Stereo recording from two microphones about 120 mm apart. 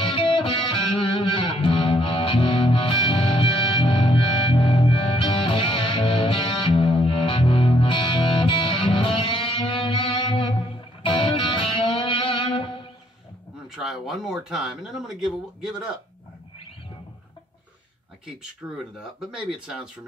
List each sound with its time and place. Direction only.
0.0 s music: 50° left (ahead or behind)
13.8 s speech: centre (ahead or behind)
18.9 s speech: 5° right (ahead or behind)